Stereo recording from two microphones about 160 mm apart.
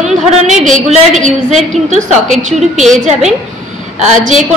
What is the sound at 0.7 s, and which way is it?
Speech, 50° right (ahead or behind).